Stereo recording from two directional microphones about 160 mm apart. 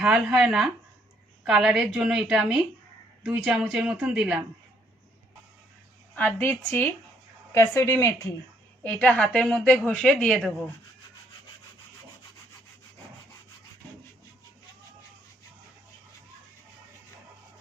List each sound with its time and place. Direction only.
0.0 s a woman's voice: 5° right (ahead or behind)
6.1 s a woman's voice: 15° left (ahead or behind)